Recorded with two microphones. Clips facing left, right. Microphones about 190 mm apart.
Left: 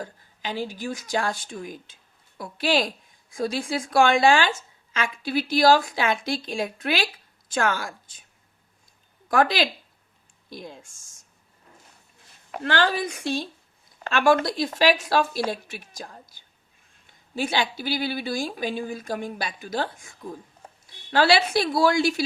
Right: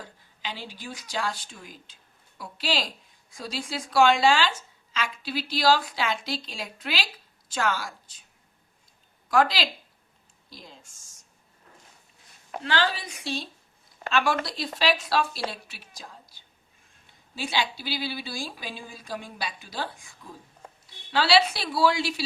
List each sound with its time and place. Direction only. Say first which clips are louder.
0.0 s a woman's voice: left 5 dB; 45° left (ahead or behind)
9.3 s a woman's voice: left 2 dB; 55° left (ahead or behind)
12.6 s a woman's voice: left 4 dB; 50° left (ahead or behind)
17.3 s a woman's voice: left 4 dB; 50° left (ahead or behind)